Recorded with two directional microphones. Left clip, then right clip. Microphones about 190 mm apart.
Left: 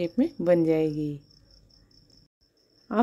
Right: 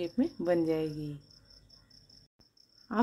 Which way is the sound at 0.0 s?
25° left (ahead or behind).